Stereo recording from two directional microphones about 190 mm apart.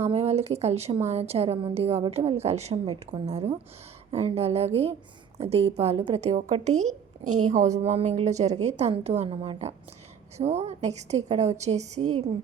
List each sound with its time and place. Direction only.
0.0 s a woman's voice: 35° right (ahead or behind)